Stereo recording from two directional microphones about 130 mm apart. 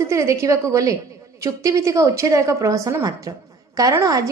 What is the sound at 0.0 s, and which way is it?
A woman's voice, 20° right (ahead or behind).